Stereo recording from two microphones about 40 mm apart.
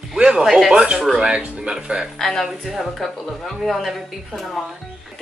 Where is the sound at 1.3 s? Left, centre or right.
Centre.